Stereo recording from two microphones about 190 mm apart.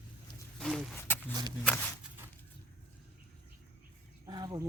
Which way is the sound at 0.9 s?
10° left (ahead or behind).